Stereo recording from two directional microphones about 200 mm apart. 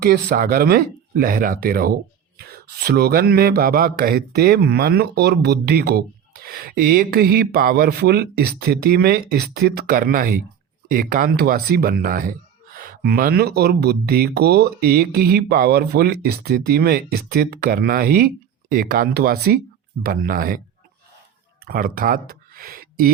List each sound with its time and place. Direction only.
0.0 s speech: 55° right (ahead or behind)
21.6 s speech: 45° right (ahead or behind)